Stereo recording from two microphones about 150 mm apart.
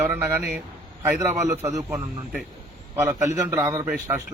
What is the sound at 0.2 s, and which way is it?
A man's voice, 15° right (ahead or behind).